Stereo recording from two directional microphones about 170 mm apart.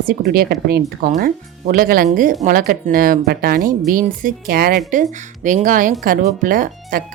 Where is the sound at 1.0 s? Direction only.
55° right (ahead or behind).